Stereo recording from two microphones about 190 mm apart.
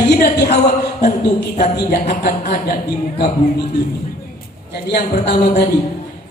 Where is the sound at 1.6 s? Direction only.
50° left (ahead or behind).